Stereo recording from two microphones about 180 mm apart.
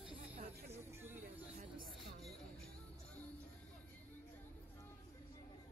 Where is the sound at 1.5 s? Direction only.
45° right (ahead or behind).